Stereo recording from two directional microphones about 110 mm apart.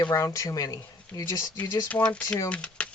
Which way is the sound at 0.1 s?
30° left (ahead or behind).